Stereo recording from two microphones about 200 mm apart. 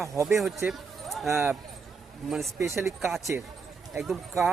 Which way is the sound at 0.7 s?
Centre (ahead or behind).